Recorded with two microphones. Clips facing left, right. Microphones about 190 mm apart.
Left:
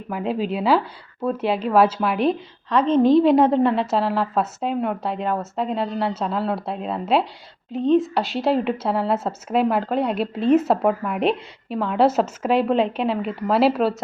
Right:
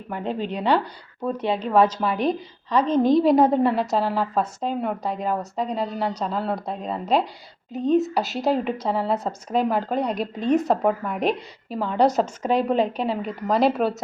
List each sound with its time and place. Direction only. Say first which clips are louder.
0.1 s a woman's voice: left 3 dB; 5° left (ahead or behind)
2.8 s a woman's voice: left 4 dB; 30° left (ahead or behind)
3.1 s a woman's voice: left 1 dB; centre (ahead or behind)